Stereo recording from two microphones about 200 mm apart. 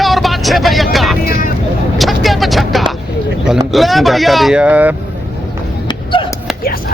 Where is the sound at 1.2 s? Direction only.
50° left (ahead or behind).